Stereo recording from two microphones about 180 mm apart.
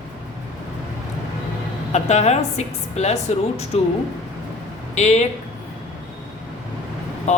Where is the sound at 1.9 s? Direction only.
40° left (ahead or behind).